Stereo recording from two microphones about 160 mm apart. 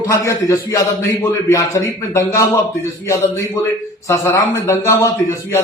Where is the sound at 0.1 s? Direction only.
20° left (ahead or behind).